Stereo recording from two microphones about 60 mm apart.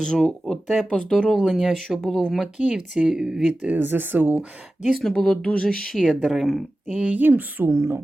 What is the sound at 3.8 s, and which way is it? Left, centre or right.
Speech, right.